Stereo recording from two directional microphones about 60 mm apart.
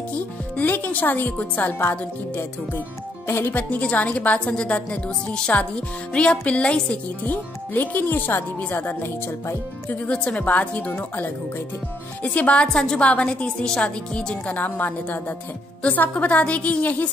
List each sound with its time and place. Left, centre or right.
0.6 s speech: left
3.3 s speech: left
3.5 s a woman's voice: left
7.2 s speech: left
9.8 s a woman's voice: left
12.2 s a woman's voice: left
12.6 s a woman's voice: centre